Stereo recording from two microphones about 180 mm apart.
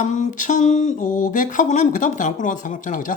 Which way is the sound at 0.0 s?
45° left (ahead or behind).